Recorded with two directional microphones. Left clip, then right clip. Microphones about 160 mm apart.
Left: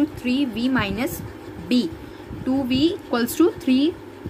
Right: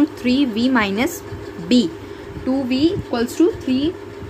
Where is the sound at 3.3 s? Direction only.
45° left (ahead or behind).